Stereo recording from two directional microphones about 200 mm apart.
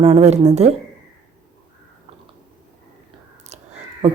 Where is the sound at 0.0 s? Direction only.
30° right (ahead or behind).